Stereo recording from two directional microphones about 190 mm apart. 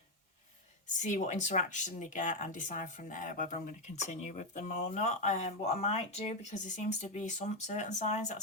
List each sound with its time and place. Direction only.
0.9 s speech: 40° left (ahead or behind)